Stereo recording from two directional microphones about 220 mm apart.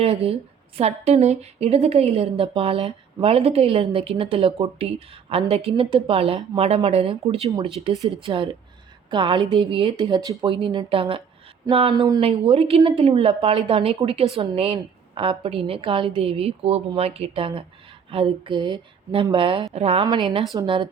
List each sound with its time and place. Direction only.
0.0 s a woman's voice: 25° right (ahead or behind)